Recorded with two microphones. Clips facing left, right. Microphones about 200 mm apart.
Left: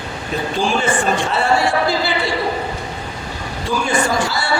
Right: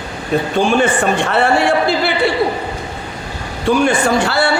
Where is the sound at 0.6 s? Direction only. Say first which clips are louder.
Right 4 dB; 60° right (ahead or behind).